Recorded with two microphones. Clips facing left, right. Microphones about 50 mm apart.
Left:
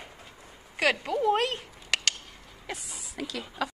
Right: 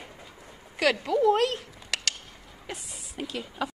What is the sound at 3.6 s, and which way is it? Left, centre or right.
Speech, left.